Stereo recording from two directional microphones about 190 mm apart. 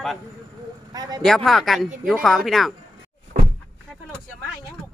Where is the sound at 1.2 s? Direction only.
Centre (ahead or behind).